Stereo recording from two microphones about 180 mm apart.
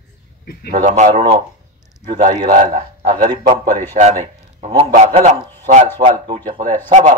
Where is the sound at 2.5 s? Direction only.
50° right (ahead or behind).